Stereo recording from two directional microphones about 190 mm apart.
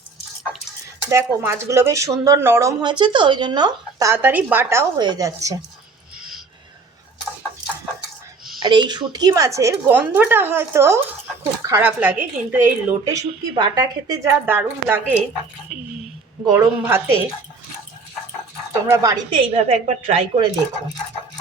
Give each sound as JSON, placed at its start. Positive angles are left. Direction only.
{"t": 1.1, "sound": "speech", "side_deg": -15}
{"t": 8.5, "sound": "speech", "side_deg": -25}
{"t": 13.1, "sound": "speech", "side_deg": -20}
{"t": 16.5, "sound": "speech", "side_deg": -10}
{"t": 18.7, "sound": "a woman's voice", "side_deg": -15}